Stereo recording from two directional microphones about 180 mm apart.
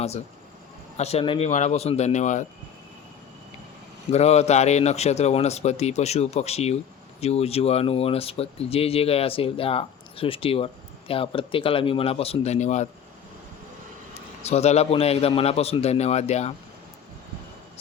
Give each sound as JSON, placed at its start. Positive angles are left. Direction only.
{"t": 0.9, "sound": "speech", "side_deg": 35}
{"t": 4.1, "sound": "speech", "side_deg": 35}
{"t": 14.4, "sound": "speech", "side_deg": 35}